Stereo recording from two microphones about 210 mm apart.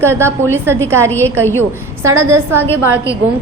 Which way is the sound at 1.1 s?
10° left (ahead or behind).